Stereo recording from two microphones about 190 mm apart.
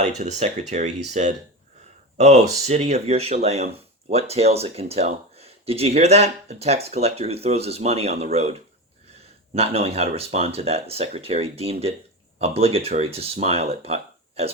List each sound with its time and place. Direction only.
0.0 s speech: 35° right (ahead or behind)